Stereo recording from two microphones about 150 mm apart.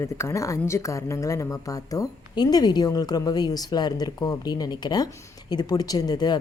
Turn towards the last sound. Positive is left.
turn(degrees=25)  # may be behind; listen again after turning